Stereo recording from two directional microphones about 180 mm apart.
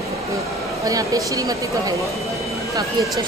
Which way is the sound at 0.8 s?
20° right (ahead or behind).